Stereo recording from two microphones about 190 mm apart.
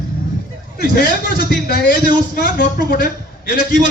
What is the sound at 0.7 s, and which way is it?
A man's voice, 55° left (ahead or behind).